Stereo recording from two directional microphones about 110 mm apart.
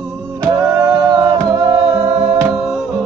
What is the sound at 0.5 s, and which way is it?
Music, 30° right (ahead or behind).